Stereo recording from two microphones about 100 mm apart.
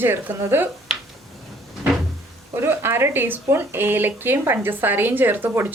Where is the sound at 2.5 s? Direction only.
25° right (ahead or behind).